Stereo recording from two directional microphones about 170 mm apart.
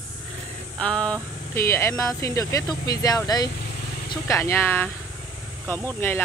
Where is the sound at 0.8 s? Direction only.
5° left (ahead or behind).